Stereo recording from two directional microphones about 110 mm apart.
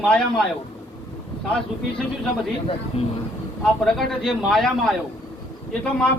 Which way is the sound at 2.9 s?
65° left (ahead or behind).